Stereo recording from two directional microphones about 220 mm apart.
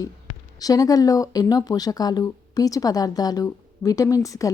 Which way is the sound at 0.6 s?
15° left (ahead or behind).